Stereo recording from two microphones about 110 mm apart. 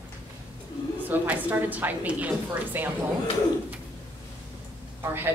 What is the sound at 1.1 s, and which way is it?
A woman's voice, 15° right (ahead or behind).